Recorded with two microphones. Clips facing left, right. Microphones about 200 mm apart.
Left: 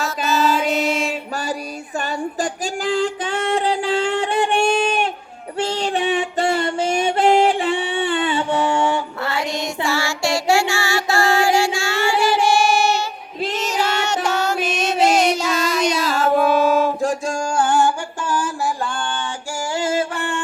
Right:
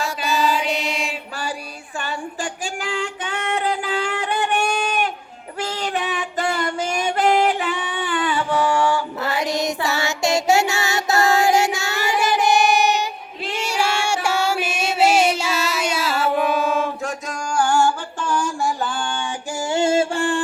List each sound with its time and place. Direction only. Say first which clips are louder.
0.3 s mantra: left 3 dB; 15° right (ahead or behind)
2.0 s female singing: left 5 dB; 40° left (ahead or behind); by 9.0 s 20° left (ahead or behind)
9.2 s child singing: right 2 dB; 20° right (ahead or behind)
13.5 s female singing: even; 10° right (ahead or behind)
16.4 s music: left 4 dB; 40° left (ahead or behind); by 18.3 s 15° left (ahead or behind)
18.3 s music: even; 5° left (ahead or behind)
19.7 s music: right 4 dB; 25° right (ahead or behind)